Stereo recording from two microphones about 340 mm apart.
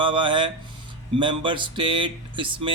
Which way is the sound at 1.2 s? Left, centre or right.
Centre.